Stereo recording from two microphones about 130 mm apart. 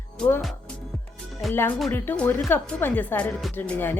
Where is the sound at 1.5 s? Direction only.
15° left (ahead or behind).